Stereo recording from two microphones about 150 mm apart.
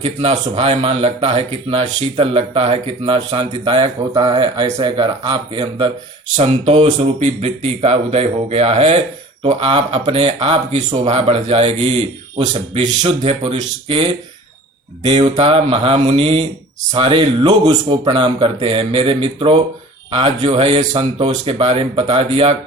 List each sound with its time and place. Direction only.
0.0 s speech: 40° right (ahead or behind)
6.3 s speech: 45° right (ahead or behind)